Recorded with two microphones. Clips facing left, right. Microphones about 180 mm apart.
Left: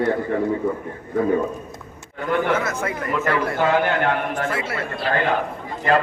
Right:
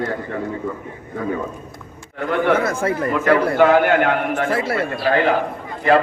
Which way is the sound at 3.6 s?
60° right (ahead or behind).